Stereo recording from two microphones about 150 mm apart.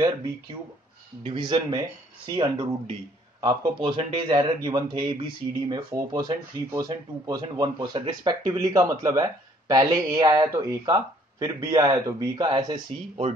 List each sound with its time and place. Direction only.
1.2 s speech: 30° right (ahead or behind)